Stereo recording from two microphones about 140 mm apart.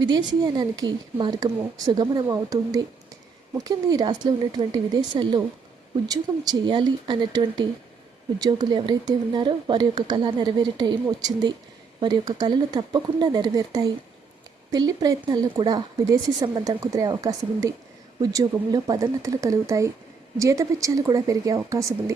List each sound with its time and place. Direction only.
0.0 s a woman's voice: 30° right (ahead or behind)